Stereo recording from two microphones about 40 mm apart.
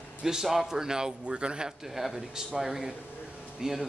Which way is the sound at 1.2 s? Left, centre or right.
Right.